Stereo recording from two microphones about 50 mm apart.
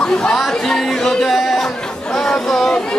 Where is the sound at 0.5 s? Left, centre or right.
Centre.